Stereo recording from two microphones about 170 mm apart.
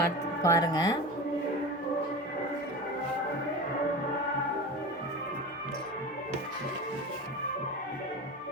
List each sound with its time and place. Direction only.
0.0 s speech: 20° left (ahead or behind)